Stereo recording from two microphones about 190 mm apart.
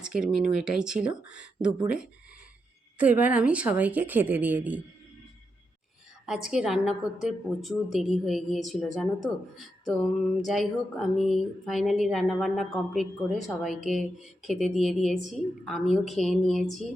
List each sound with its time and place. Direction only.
0.0 s a woman's voice: 5° right (ahead or behind)
3.0 s a woman's voice: 5° right (ahead or behind)
6.2 s a woman's voice: 5° right (ahead or behind)